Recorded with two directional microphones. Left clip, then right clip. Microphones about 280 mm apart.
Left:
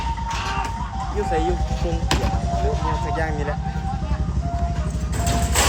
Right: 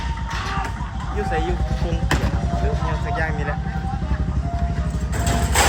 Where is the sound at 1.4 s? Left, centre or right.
Left.